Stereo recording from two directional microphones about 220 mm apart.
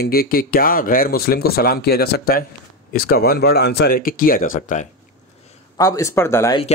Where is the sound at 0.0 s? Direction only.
45° left (ahead or behind).